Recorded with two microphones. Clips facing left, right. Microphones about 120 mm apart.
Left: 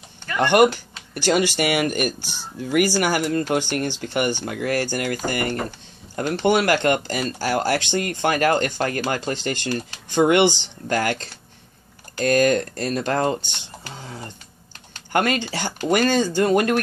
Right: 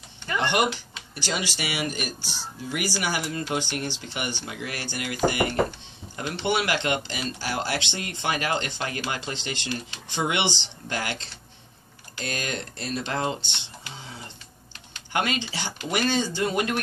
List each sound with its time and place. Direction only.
0.4 s speech: 50° left (ahead or behind)